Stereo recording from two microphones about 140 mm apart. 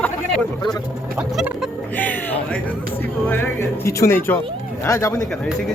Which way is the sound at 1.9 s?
10° left (ahead or behind).